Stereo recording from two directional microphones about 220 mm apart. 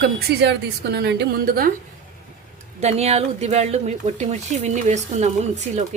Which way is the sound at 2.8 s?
30° right (ahead or behind).